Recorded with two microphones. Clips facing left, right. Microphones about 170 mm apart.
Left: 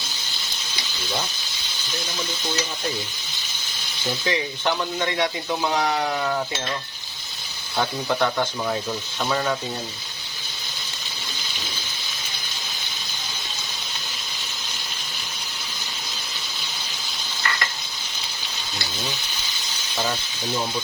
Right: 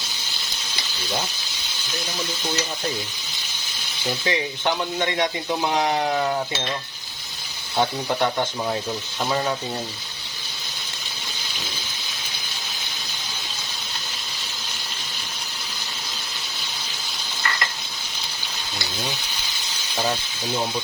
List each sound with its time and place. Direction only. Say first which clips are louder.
4.3 s speech: even; 20° right (ahead or behind)
7.8 s speech: right 1 dB; 20° right (ahead or behind)